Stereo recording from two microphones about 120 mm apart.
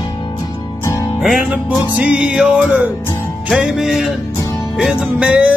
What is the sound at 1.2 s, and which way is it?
Music, 10° right (ahead or behind).